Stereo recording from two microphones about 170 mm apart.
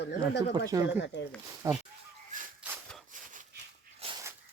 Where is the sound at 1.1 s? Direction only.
90° left.